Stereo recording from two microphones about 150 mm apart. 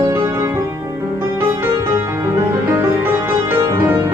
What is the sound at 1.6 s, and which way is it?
Music, 15° right (ahead or behind).